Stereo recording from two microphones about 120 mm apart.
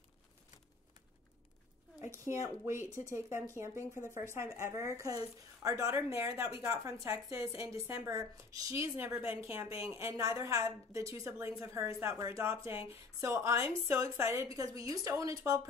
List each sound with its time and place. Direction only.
2.2 s a woman's voice: 25° right (ahead or behind)